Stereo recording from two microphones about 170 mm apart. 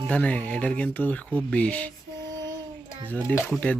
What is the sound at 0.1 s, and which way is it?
Speech, 10° left (ahead or behind).